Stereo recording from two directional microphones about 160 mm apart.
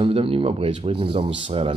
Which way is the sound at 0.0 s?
35° right (ahead or behind).